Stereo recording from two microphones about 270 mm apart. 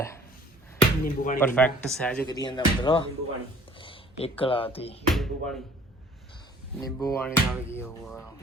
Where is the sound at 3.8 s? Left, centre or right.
Left.